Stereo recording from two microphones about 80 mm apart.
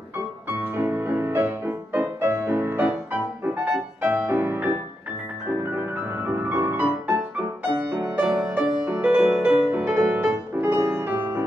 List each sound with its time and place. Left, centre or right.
0.5 s music: right
2.9 s music: centre